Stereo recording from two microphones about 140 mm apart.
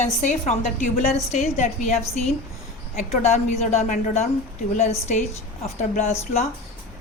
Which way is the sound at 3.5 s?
55° left (ahead or behind).